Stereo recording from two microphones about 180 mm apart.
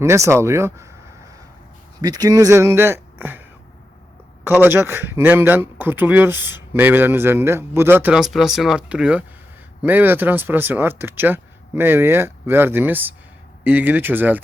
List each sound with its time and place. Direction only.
0.0 s a man's voice: 15° right (ahead or behind)
2.0 s speech: 20° right (ahead or behind)
4.4 s a man's voice: 10° right (ahead or behind)